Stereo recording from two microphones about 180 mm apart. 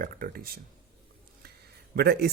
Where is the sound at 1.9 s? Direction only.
65° right (ahead or behind).